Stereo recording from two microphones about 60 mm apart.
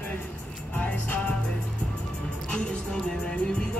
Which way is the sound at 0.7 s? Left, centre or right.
Left.